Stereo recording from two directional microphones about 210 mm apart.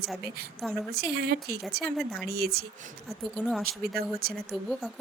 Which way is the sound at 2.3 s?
50° right (ahead or behind).